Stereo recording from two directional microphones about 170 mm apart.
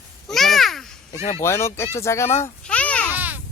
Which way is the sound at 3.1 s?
10° right (ahead or behind).